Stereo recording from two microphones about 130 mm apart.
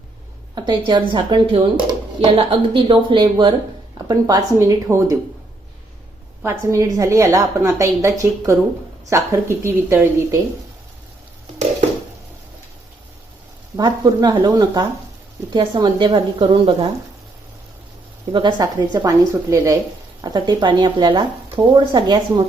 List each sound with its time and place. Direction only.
0.5 s a woman's voice: 35° right (ahead or behind)
6.4 s a woman's voice: 20° right (ahead or behind)
13.7 s speech: 30° right (ahead or behind)
18.3 s a woman's voice: 35° right (ahead or behind)